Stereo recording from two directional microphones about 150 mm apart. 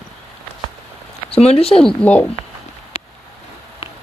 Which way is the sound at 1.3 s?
40° left (ahead or behind).